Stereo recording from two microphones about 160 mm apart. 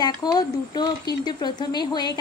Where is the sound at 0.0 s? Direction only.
25° left (ahead or behind).